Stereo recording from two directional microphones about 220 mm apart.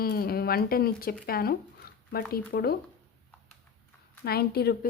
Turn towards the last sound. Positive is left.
turn(degrees=45)  # may be behind; listen again after turning